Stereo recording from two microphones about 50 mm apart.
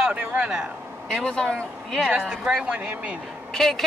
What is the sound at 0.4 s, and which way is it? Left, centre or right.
Speech, centre.